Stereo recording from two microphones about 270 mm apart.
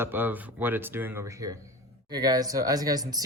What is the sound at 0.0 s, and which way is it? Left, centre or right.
Speech, centre.